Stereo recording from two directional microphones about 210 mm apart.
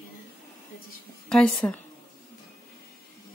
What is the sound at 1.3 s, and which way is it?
Speech, centre (ahead or behind).